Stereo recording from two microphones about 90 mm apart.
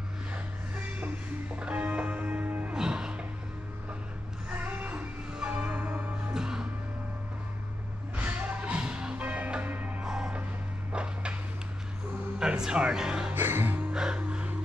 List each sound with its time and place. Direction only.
0.7 s music: 15° right (ahead or behind)
2.7 s music: 10° right (ahead or behind)
4.5 s music: 15° right (ahead or behind)
8.2 s music: 15° right (ahead or behind)
10.0 s music: 10° right (ahead or behind)
10.9 s a sound: 10° right (ahead or behind)
12.4 s speech: 10° right (ahead or behind)
13.3 s music: 25° right (ahead or behind)
13.9 s music: 10° right (ahead or behind)